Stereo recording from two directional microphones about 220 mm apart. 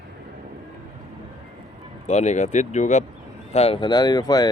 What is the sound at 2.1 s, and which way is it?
Speech, 30° left (ahead or behind).